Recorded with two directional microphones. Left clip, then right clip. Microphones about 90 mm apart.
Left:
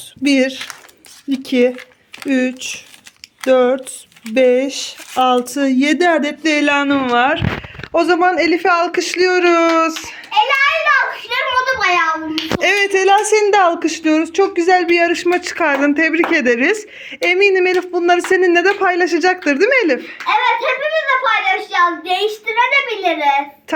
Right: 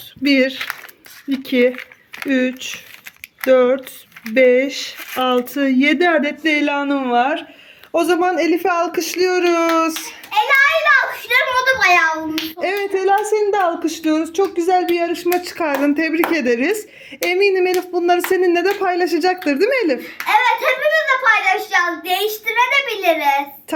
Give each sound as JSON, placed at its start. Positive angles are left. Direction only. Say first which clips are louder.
{"t": 0.2, "sound": "speech", "louder": "left 1 dB", "side_deg": 10}
{"t": 6.8, "sound": "speech", "louder": "left 3 dB", "side_deg": -5}
{"t": 7.9, "sound": "speech", "louder": "left 3 dB", "side_deg": -20}
{"t": 10.2, "sound": "a sound", "louder": "even", "side_deg": -50}
{"t": 12.5, "sound": "speech", "louder": "left 8 dB", "side_deg": -5}
{"t": 12.8, "sound": "speech", "louder": "left 2 dB", "side_deg": 10}
{"t": 13.6, "sound": "speech", "louder": "left 4 dB", "side_deg": 0}
{"t": 15.4, "sound": "speech", "louder": "left 4 dB", "side_deg": -20}
{"t": 22.3, "sound": "a child's voice", "louder": "left 1 dB", "side_deg": -45}